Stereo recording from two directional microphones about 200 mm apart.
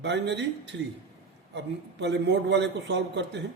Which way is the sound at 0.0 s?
60° right (ahead or behind).